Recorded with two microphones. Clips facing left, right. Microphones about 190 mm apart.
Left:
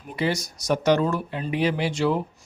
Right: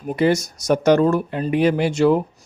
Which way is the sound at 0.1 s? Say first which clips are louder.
Right 8 dB; 50° right (ahead or behind).